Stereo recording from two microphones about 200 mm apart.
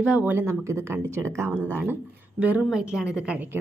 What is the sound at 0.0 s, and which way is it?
A woman's voice, 5° right (ahead or behind).